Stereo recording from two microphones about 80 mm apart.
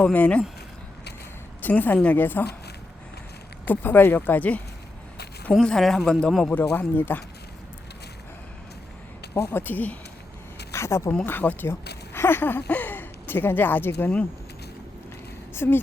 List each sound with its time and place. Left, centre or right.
0.0 s speech: centre
1.6 s speech: left
3.7 s speech: left
5.5 s a man's voice: centre
6.5 s speech: left
9.3 s speech: left
10.7 s speech: left
15.5 s speech: left